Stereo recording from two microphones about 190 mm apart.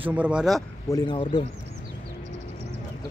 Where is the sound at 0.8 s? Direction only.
20° left (ahead or behind).